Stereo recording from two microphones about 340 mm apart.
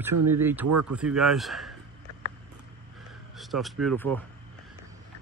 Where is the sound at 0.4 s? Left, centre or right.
Centre.